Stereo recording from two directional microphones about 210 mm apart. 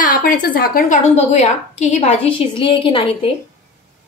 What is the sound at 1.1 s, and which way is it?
A woman's voice, 30° left (ahead or behind).